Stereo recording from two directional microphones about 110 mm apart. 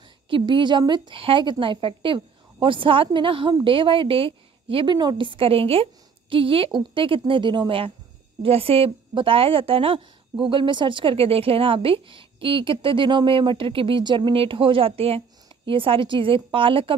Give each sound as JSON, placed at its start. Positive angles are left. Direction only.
{"t": 0.3, "sound": "a woman's voice", "side_deg": -45}
{"t": 8.4, "sound": "a woman's voice", "side_deg": -60}